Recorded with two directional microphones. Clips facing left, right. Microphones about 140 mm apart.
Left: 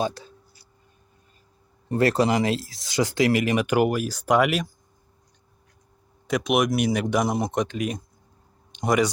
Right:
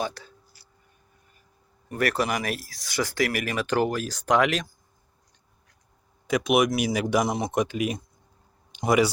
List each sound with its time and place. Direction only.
0.0 s speech: 20° left (ahead or behind)
1.9 s speech: 25° left (ahead or behind); by 4.7 s 10° left (ahead or behind)
6.2 s speech: centre (ahead or behind)
8.7 s a sound: 5° right (ahead or behind)